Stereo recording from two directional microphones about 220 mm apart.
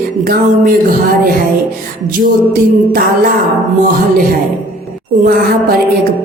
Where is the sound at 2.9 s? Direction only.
40° right (ahead or behind).